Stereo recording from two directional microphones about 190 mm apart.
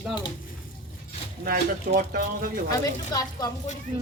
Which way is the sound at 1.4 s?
50° right (ahead or behind).